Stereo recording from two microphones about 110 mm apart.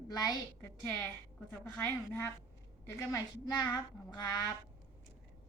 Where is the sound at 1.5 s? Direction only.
15° left (ahead or behind).